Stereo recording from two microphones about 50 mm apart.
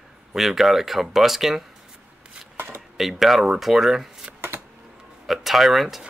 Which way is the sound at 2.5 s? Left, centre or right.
Right.